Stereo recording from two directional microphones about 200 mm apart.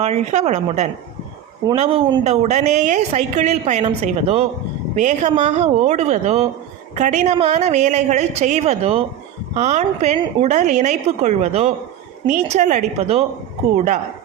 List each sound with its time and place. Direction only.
0.0 s speech: 35° right (ahead or behind)